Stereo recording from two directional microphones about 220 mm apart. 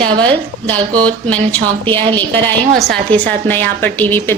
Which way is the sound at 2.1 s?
10° left (ahead or behind).